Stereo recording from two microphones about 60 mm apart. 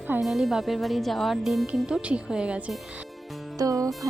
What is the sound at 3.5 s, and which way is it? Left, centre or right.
Music, right.